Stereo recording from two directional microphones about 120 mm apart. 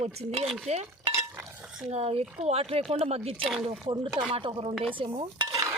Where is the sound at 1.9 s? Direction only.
55° right (ahead or behind).